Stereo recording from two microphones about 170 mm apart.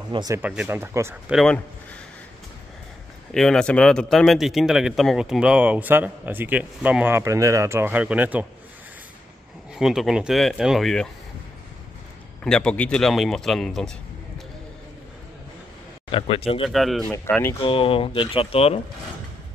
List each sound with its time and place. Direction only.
0.1 s speech: 25° right (ahead or behind)
0.4 s speech: 10° right (ahead or behind)
1.3 s speech: centre (ahead or behind)
3.3 s speech: 5° left (ahead or behind)
9.8 s speech: centre (ahead or behind)
12.4 s speech: 5° left (ahead or behind)
16.1 s speech: 30° left (ahead or behind)
16.6 s speech: centre (ahead or behind)
17.1 s speech: 10° left (ahead or behind)
17.6 s speech: 30° left (ahead or behind)